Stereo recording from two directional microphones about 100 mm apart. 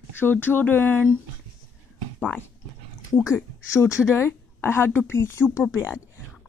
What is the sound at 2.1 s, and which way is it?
Speech, 20° left (ahead or behind).